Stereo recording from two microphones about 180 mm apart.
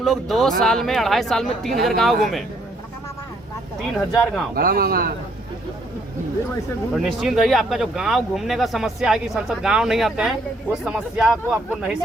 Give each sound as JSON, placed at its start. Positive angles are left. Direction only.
{"t": 0.0, "sound": "speech", "side_deg": 0}
{"t": 4.2, "sound": "speech", "side_deg": 5}
{"t": 4.5, "sound": "a man's voice", "side_deg": -55}
{"t": 6.9, "sound": "speech", "side_deg": 0}